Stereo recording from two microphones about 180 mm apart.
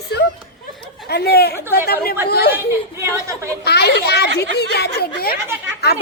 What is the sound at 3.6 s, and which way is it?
Speech, 65° left (ahead or behind).